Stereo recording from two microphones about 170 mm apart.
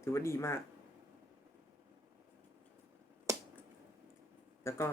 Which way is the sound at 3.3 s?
15° right (ahead or behind).